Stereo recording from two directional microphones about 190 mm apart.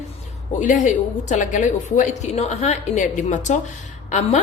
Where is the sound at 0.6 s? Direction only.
40° left (ahead or behind).